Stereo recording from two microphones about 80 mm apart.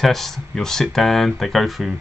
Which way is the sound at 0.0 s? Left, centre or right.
Centre.